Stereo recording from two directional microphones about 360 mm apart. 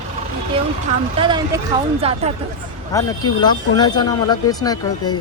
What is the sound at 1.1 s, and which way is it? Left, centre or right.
Speech, centre.